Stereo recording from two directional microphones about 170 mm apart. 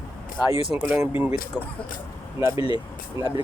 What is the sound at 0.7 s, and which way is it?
Speech, 10° right (ahead or behind).